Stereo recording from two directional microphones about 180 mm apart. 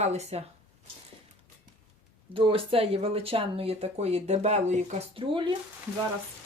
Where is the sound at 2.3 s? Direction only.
30° right (ahead or behind).